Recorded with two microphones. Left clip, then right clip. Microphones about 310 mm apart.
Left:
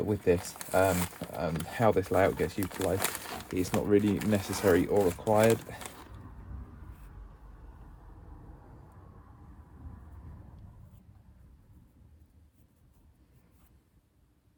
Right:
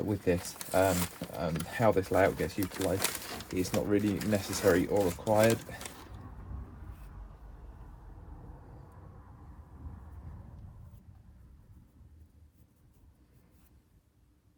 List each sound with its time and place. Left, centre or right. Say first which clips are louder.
0.0 s speech: left 3 dB; centre